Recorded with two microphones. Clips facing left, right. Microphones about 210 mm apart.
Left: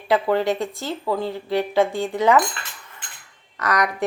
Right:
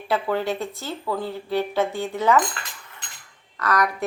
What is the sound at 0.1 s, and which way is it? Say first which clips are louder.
A woman's voice: left 4 dB; 15° left (ahead or behind).